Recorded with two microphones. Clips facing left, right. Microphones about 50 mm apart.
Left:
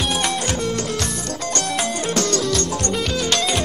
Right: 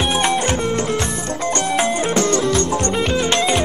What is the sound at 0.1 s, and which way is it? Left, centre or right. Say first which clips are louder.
Music: right 4 dB; right.